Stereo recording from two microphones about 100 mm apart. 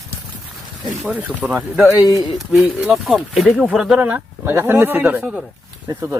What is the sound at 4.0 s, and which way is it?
Speech, 20° right (ahead or behind).